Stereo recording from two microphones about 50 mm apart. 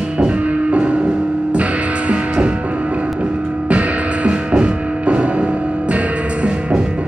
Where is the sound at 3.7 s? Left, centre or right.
Right.